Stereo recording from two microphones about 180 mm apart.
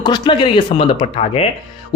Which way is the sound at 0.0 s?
25° left (ahead or behind).